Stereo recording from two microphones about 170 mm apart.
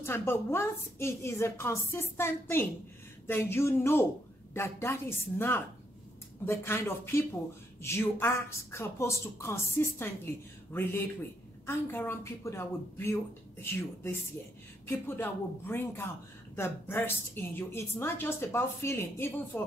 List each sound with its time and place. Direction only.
0.0 s a woman's voice: 15° left (ahead or behind)